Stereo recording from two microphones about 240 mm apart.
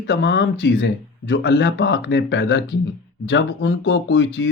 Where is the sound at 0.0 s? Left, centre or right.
Left.